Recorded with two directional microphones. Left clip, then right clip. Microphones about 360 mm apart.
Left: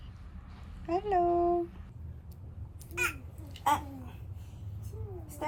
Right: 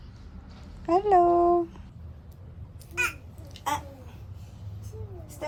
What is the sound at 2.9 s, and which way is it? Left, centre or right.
Babbling, centre.